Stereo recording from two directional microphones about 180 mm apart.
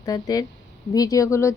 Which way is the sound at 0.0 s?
20° left (ahead or behind).